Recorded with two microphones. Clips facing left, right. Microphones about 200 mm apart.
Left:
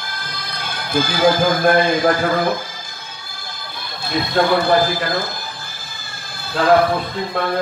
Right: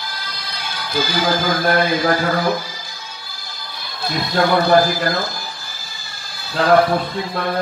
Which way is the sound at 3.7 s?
50° left (ahead or behind).